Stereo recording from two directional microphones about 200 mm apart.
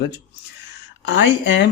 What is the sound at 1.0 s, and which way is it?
Speech, 65° left (ahead or behind).